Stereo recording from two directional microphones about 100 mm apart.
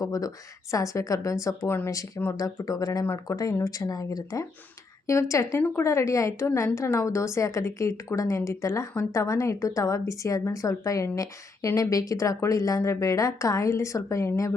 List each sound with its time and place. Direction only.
0.0 s a woman's voice: 35° left (ahead or behind)